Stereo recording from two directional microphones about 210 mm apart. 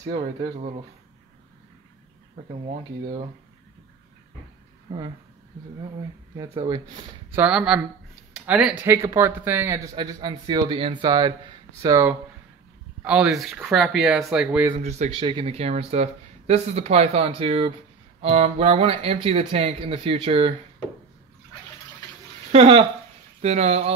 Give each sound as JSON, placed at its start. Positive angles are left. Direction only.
{"t": 0.0, "sound": "speech", "side_deg": -25}
{"t": 2.6, "sound": "speech", "side_deg": -20}
{"t": 6.3, "sound": "speech", "side_deg": -20}
{"t": 7.2, "sound": "speech", "side_deg": -5}
{"t": 9.9, "sound": "speech", "side_deg": -20}
{"t": 14.8, "sound": "speech", "side_deg": -30}
{"t": 22.5, "sound": "speech", "side_deg": -25}